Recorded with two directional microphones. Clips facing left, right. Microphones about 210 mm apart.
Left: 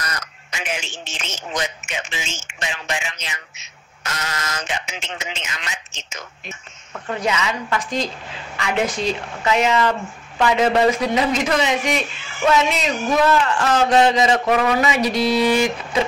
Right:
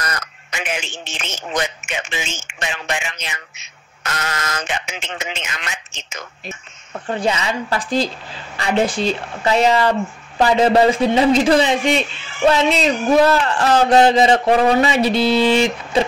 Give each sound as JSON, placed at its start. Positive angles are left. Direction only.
{"t": 0.0, "sound": "speech", "side_deg": -60}
{"t": 6.4, "sound": "a man's voice", "side_deg": -30}